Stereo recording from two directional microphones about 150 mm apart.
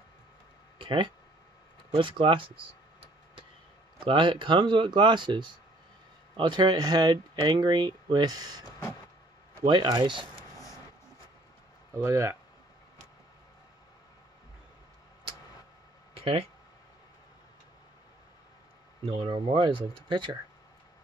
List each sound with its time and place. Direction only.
0.7 s a sound: 35° right (ahead or behind)
2.0 s speech: 35° right (ahead or behind)
4.0 s speech: 35° right (ahead or behind)
11.9 s speech: 20° right (ahead or behind)
16.2 s speech: 40° right (ahead or behind)
19.0 s speech: 35° right (ahead or behind)